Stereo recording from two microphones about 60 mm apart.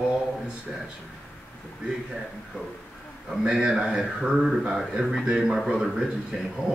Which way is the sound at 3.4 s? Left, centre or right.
Centre.